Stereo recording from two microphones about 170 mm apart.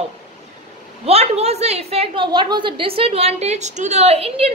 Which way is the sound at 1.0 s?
35° right (ahead or behind).